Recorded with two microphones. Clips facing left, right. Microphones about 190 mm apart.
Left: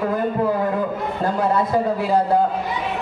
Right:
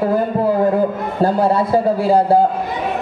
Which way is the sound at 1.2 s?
30° right (ahead or behind).